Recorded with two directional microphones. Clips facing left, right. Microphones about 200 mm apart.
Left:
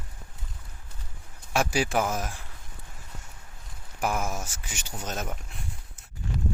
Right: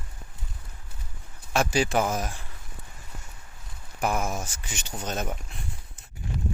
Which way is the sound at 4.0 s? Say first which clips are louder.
Right 2 dB; 5° left (ahead or behind).